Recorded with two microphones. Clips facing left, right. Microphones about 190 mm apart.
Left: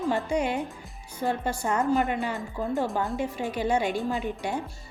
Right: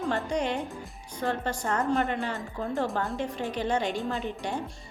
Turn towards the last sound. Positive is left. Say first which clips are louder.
# left 2 dB
turn(degrees=10)  # may be behind; listen again after turning